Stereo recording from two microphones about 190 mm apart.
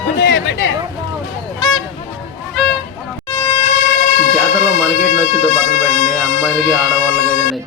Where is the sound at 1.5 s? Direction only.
Centre (ahead or behind).